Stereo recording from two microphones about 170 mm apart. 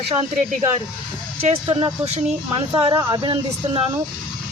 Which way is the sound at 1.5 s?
30° right (ahead or behind).